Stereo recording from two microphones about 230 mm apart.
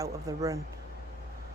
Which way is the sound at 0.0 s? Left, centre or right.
Centre.